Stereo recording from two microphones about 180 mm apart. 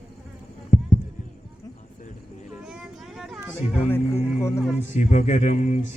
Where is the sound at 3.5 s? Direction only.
10° left (ahead or behind).